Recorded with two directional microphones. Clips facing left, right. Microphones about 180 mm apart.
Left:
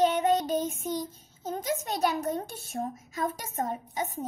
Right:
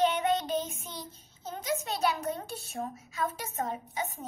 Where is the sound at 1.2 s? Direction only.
40° left (ahead or behind).